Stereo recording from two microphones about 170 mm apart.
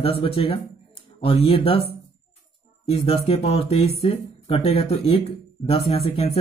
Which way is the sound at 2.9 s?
35° left (ahead or behind).